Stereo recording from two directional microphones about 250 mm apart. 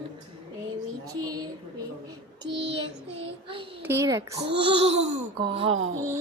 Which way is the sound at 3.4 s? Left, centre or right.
Right.